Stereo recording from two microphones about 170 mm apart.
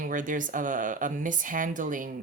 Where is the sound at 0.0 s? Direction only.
50° right (ahead or behind).